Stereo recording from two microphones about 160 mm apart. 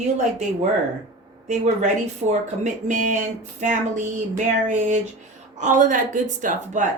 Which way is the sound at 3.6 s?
50° right (ahead or behind).